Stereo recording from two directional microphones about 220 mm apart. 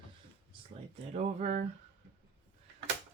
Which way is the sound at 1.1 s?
35° right (ahead or behind).